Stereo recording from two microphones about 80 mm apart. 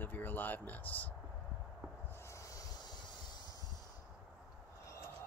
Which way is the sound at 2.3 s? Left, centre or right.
Left.